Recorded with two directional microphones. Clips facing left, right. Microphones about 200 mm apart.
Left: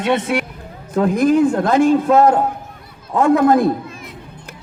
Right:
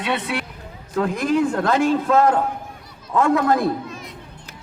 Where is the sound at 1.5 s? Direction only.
20° left (ahead or behind).